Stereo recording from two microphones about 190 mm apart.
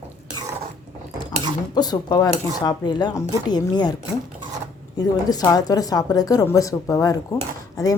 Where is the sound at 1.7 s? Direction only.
20° left (ahead or behind).